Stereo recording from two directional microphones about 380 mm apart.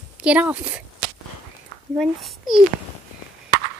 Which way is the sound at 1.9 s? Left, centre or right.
Centre.